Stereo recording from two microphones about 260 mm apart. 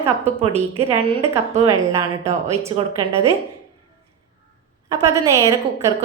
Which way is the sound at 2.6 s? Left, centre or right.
Centre.